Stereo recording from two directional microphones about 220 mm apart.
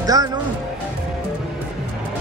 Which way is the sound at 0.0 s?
15° right (ahead or behind).